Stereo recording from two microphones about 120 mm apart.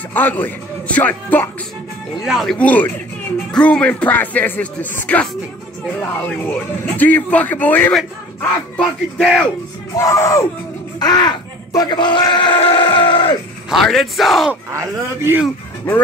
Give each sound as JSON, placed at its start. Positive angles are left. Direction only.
{"t": 0.1, "sound": "speech", "side_deg": 15}
{"t": 2.2, "sound": "speech", "side_deg": 0}
{"t": 7.0, "sound": "speech", "side_deg": 15}
{"t": 9.9, "sound": "speech", "side_deg": 25}
{"t": 11.0, "sound": "speech", "side_deg": 35}
{"t": 13.7, "sound": "speech", "side_deg": 0}
{"t": 14.5, "sound": "speech", "side_deg": -20}